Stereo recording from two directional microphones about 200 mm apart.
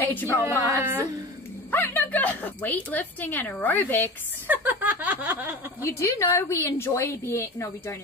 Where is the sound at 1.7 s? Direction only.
10° left (ahead or behind).